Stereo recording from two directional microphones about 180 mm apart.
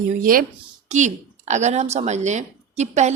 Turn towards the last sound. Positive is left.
turn(degrees=-40)  # may be behind; listen again after turning